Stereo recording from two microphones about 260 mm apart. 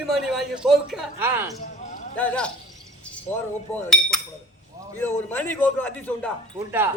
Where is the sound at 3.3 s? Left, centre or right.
Left.